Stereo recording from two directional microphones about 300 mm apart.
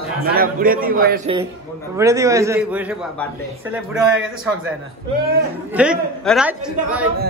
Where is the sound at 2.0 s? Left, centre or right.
Centre.